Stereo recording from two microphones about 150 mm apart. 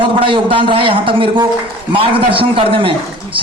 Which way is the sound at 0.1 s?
35° right (ahead or behind).